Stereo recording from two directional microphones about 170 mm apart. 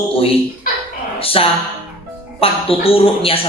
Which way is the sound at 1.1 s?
35° left (ahead or behind).